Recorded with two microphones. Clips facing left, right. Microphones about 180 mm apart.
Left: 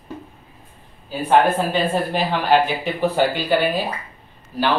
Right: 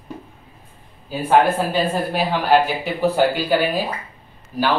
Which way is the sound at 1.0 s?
5° right (ahead or behind).